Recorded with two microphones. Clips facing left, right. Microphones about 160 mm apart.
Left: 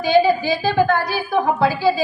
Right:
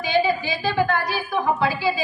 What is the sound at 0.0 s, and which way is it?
A woman's voice, 35° left (ahead or behind).